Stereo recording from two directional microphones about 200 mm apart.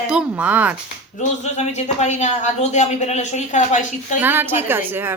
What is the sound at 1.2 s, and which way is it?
A woman's voice, 35° left (ahead or behind).